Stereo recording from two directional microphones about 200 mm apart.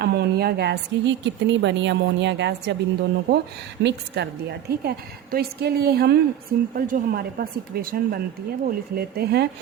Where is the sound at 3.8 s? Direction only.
60° right (ahead or behind).